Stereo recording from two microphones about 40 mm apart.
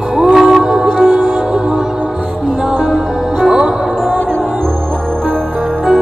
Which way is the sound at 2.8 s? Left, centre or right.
Centre.